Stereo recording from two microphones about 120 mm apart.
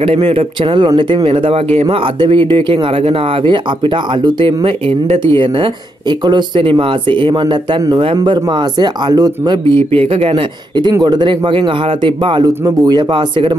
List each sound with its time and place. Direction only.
0.0 s speech: 50° right (ahead or behind); by 9.8 s 35° right (ahead or behind)
9.9 s speech: 50° right (ahead or behind)